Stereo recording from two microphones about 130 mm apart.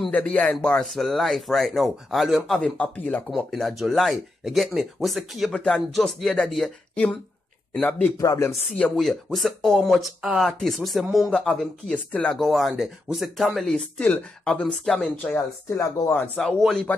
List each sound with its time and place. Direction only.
0.1 s speech: 10° left (ahead or behind)
8.2 s speech: 25° left (ahead or behind)
8.7 s speech: 5° left (ahead or behind)
15.3 s speech: 20° left (ahead or behind); by 16.9 s 5° left (ahead or behind)